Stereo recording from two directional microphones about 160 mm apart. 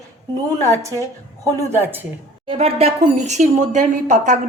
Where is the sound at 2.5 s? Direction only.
40° right (ahead or behind).